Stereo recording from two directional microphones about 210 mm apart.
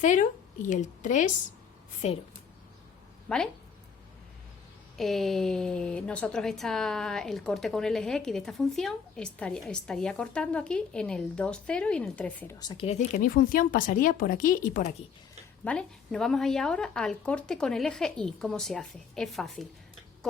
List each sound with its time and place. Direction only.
0.0 s a woman's voice: 35° left (ahead or behind)
3.2 s speech: 5° left (ahead or behind)
4.9 s speech: centre (ahead or behind); by 14.9 s 35° left (ahead or behind)
15.6 s speech: 5° left (ahead or behind)